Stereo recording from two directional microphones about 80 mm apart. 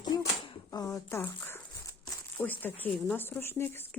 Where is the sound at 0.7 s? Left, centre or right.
Left.